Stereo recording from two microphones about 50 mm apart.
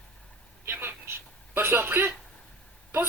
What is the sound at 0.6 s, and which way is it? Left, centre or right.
A man's voice, right.